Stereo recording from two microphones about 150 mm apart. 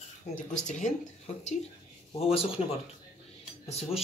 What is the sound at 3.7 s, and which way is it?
Speech, 45° left (ahead or behind).